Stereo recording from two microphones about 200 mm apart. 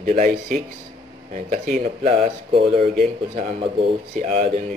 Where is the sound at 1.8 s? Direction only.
30° right (ahead or behind).